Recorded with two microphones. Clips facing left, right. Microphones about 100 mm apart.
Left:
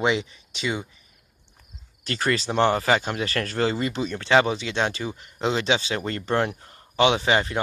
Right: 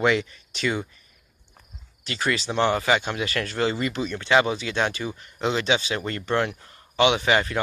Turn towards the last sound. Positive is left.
turn(degrees=30)  # may be behind; listen again after turning